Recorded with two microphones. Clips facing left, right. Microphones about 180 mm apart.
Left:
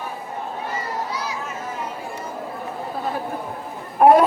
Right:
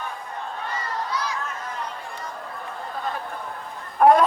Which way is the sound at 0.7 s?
10° left (ahead or behind).